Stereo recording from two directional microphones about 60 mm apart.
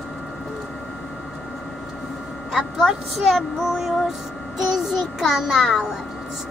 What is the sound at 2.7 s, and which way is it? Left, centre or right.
Speech, centre.